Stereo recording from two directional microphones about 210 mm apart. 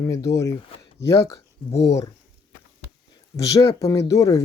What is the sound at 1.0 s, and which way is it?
Speech, 55° left (ahead or behind).